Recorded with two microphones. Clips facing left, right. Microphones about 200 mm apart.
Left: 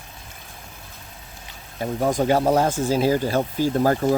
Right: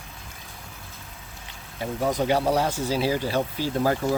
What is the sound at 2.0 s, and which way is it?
Speech, 45° left (ahead or behind).